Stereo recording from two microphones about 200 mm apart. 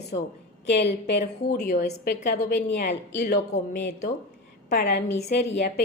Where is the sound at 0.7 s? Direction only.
60° left (ahead or behind).